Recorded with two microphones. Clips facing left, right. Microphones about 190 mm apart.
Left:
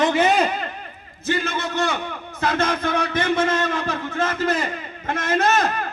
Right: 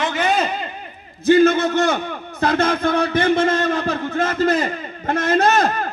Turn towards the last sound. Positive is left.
turn(degrees=-35)  # may be behind; listen again after turning